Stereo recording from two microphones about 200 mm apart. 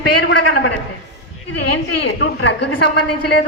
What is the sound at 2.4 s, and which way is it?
Speech, 60° left (ahead or behind).